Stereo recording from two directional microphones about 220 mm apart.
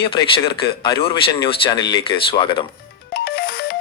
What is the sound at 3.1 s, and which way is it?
Music, 45° left (ahead or behind).